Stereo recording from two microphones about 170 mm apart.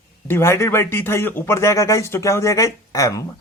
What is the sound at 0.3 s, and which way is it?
Speech, 15° left (ahead or behind).